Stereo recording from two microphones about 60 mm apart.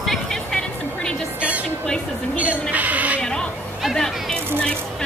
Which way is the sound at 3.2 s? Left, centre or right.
Centre.